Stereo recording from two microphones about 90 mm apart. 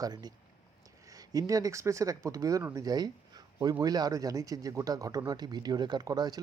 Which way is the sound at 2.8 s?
45° right (ahead or behind).